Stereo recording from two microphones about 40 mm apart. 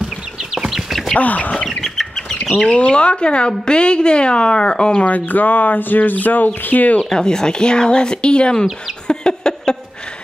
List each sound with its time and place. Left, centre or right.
1.1 s bird: left
2.6 s speech: left
5.0 s a sound: left
7.1 s speech: centre
9.0 s bird: centre